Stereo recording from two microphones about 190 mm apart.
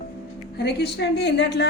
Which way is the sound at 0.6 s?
60° left (ahead or behind).